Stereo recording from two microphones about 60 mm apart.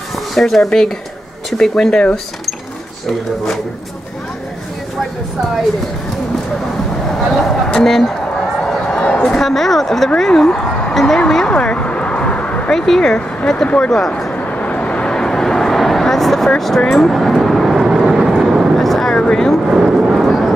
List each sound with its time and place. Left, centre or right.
0.3 s speech: centre
7.7 s speech: centre
8.5 s run: centre
9.0 s a woman's voice: centre
11.5 s a sound: centre
12.7 s speech: centre
14.3 s vehicle: left; by 18.7 s centre
18.8 s a sound: centre
19.7 s speech: centre
20.2 s a sound: centre